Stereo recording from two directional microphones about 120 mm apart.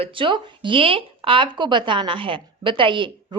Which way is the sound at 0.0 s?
45° right (ahead or behind).